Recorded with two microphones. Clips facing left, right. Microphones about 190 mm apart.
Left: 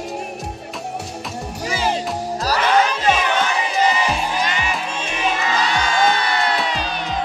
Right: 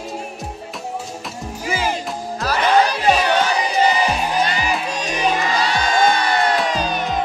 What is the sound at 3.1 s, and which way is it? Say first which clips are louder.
Crowd: right 2 dB; 35° right (ahead or behind).